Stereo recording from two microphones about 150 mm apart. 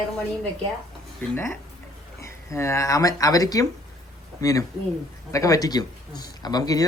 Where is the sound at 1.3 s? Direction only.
15° left (ahead or behind).